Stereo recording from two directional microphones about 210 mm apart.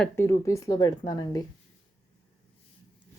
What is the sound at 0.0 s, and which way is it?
A woman's voice, 15° left (ahead or behind).